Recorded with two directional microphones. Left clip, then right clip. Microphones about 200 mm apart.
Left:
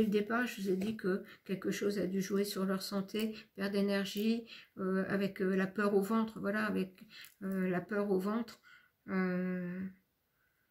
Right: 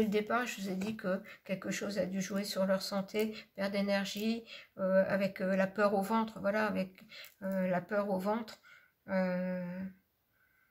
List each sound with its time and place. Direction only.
0.3 s speech: 35° right (ahead or behind)